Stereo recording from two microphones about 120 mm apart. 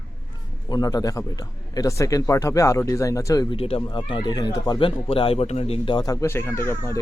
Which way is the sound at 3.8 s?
40° left (ahead or behind).